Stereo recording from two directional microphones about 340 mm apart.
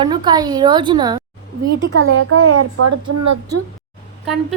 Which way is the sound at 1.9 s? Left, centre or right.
Right.